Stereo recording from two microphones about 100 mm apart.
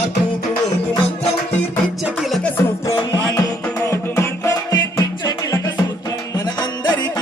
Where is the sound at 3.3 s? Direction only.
40° left (ahead or behind).